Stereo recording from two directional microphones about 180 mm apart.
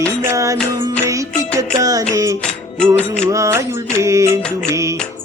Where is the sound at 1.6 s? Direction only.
20° right (ahead or behind).